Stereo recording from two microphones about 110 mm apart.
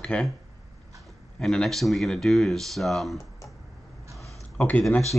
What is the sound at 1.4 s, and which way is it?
Speech, 5° left (ahead or behind).